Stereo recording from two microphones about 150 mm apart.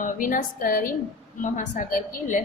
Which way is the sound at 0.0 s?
60° left (ahead or behind).